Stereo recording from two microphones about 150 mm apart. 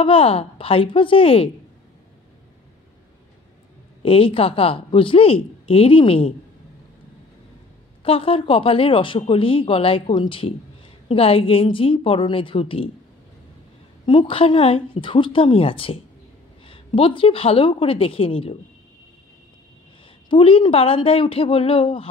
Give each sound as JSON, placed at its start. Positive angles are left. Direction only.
{"t": 0.0, "sound": "speech", "side_deg": 40}
{"t": 4.0, "sound": "speech", "side_deg": 40}
{"t": 8.0, "sound": "speech", "side_deg": 35}
{"t": 14.0, "sound": "speech", "side_deg": 35}
{"t": 20.2, "sound": "speech", "side_deg": 35}